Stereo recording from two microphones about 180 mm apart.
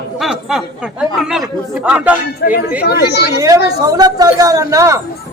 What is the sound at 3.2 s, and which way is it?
A woman's voice, 15° right (ahead or behind).